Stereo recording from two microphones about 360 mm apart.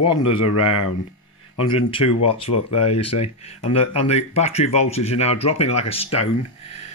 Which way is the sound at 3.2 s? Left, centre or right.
Centre.